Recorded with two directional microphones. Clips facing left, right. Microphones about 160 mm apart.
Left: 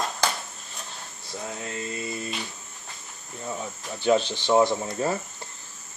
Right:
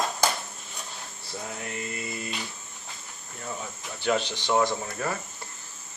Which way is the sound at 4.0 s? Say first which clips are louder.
Left 5 dB; 20° left (ahead or behind).